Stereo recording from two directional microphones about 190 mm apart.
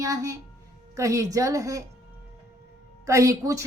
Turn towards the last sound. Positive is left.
turn(degrees=-15)  # may be behind; listen again after turning